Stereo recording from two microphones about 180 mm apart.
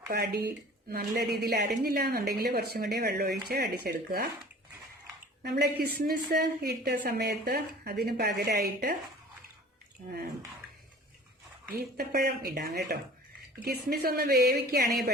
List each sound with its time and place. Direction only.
0.1 s a woman's voice: 60° right (ahead or behind)
5.4 s a woman's voice: 65° right (ahead or behind)
11.7 s a woman's voice: 60° right (ahead or behind)